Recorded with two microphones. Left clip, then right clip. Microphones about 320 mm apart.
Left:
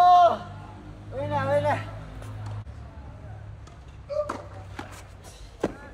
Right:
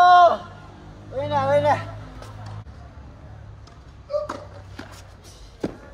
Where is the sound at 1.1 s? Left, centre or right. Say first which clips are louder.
Right 5 dB; right.